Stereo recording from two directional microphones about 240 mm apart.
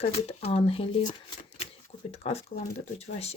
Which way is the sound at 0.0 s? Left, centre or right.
Left.